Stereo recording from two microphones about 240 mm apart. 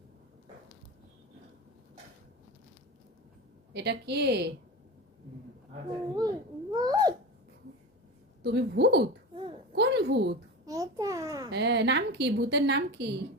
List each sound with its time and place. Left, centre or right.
3.7 s a woman's voice: right
6.1 s babbling: centre
8.4 s a woman's voice: right
9.3 s a sound: right
9.7 s a sound: right
10.7 s babbling: centre
11.5 s a woman's voice: right